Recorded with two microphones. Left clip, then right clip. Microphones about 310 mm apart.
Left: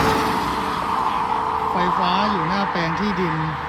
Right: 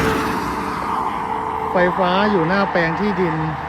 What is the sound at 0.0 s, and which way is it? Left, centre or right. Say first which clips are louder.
Vehicle: left 1 dB; centre.